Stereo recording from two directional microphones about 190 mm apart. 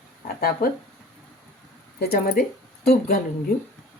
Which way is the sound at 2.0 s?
55° left (ahead or behind).